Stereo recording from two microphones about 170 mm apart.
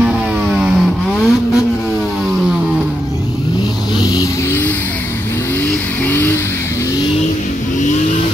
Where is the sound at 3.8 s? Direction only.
25° left (ahead or behind).